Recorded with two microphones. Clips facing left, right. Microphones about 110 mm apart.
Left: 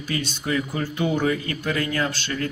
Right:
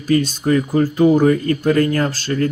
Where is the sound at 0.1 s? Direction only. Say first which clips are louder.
Right 11 dB; 45° right (ahead or behind).